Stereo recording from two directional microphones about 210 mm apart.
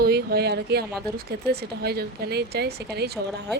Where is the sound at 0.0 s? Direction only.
50° right (ahead or behind).